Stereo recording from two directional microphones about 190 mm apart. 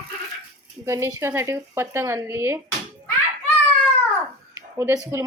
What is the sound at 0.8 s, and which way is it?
Speech, 15° right (ahead or behind).